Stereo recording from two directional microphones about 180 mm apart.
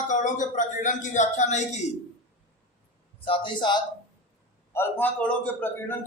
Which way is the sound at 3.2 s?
30° left (ahead or behind).